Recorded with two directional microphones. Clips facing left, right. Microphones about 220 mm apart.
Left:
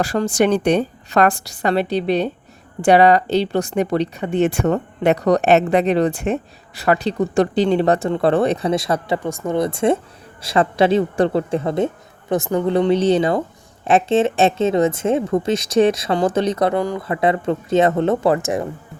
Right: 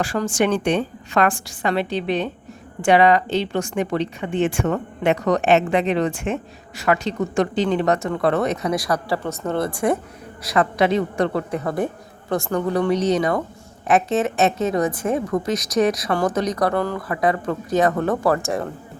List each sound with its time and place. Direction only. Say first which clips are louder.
0.0 s a woman's voice: left 3 dB; 40° left (ahead or behind); by 17.0 s 15° left (ahead or behind)
17.0 s a woman's voice: left 2 dB; 25° left (ahead or behind)